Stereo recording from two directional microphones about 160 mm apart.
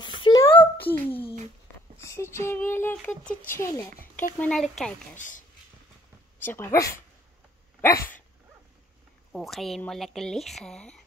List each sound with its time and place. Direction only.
0.1 s a sound: 25° left (ahead or behind)
0.5 s a sound: 10° left (ahead or behind)
2.0 s speech: 15° left (ahead or behind)
4.4 s speech: 5° left (ahead or behind)
5.1 s speech: 55° left (ahead or behind)
6.4 s speech: 15° left (ahead or behind)
7.8 s dog: 15° left (ahead or behind)
9.3 s speech: centre (ahead or behind)